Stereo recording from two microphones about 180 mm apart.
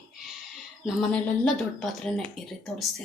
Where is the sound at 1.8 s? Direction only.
Centre (ahead or behind).